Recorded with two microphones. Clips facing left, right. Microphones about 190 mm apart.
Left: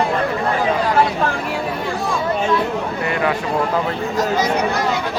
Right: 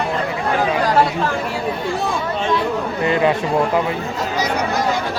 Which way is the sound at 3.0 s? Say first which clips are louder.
Right 5 dB; 25° right (ahead or behind).